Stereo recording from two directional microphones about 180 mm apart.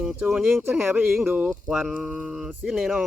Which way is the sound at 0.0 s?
5° right (ahead or behind).